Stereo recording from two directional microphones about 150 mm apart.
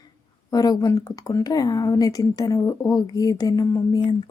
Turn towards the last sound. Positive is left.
turn(degrees=20)  # may be behind; listen again after turning